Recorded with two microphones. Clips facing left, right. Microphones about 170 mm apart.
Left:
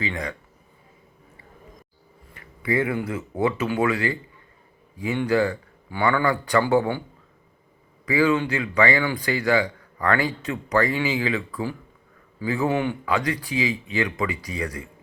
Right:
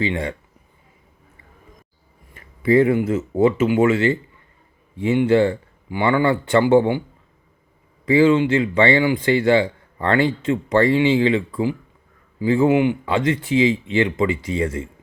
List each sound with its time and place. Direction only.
0.0 s speech: 30° right (ahead or behind)
2.3 s speech: 25° right (ahead or behind)
8.0 s speech: 25° right (ahead or behind)